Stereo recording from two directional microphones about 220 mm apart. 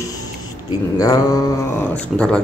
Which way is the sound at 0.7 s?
15° left (ahead or behind).